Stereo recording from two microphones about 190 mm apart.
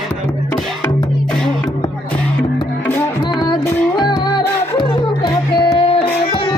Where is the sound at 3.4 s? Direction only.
20° left (ahead or behind).